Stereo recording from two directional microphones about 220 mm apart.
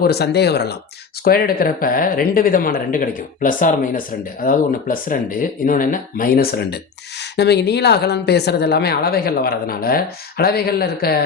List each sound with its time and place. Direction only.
0.0 s speech: 45° left (ahead or behind)